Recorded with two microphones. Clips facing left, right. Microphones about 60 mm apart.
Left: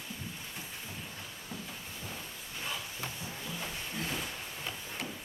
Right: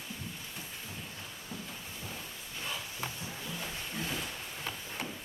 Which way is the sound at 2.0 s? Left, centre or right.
Centre.